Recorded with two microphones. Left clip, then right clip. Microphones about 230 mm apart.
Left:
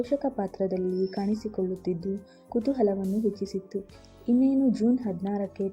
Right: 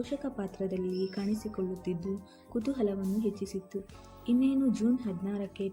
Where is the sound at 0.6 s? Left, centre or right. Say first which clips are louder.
Left 5 dB; centre.